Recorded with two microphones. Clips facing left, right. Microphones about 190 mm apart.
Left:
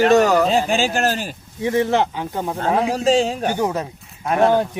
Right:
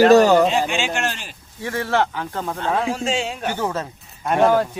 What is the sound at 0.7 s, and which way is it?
Speech, 35° left (ahead or behind).